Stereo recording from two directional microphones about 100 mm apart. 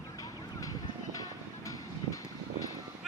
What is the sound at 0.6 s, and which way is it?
Music, 35° left (ahead or behind).